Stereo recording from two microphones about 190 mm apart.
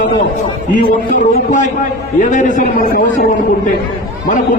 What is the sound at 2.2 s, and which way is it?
A man's voice, 40° left (ahead or behind).